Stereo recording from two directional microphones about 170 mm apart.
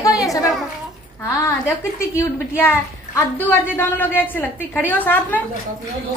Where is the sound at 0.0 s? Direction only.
20° left (ahead or behind).